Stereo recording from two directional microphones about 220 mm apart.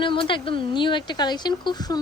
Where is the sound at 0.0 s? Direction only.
20° left (ahead or behind).